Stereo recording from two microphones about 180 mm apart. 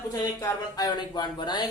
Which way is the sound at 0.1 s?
20° left (ahead or behind).